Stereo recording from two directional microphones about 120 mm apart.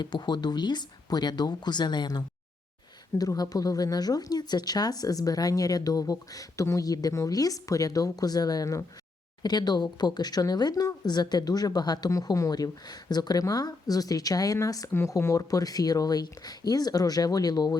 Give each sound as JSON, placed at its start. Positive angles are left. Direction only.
{"t": 0.0, "sound": "speech", "side_deg": 35}